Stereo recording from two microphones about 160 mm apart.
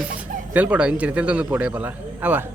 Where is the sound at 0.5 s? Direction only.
10° right (ahead or behind).